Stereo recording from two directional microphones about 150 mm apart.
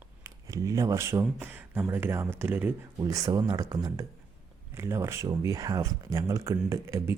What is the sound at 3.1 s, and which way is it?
Speech, 25° right (ahead or behind).